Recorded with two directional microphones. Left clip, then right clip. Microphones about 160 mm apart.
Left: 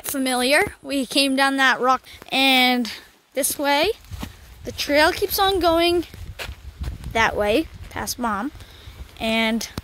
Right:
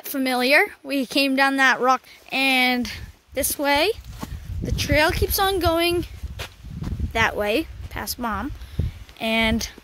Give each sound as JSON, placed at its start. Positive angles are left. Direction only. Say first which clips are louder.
{"t": 0.1, "sound": "speech", "louder": "right 1 dB", "side_deg": 0}
{"t": 2.2, "sound": "speech", "louder": "left 3 dB", "side_deg": 20}
{"t": 4.6, "sound": "a woman's voice", "louder": "left 2 dB", "side_deg": 10}
{"t": 9.2, "sound": "speech", "louder": "even", "side_deg": 5}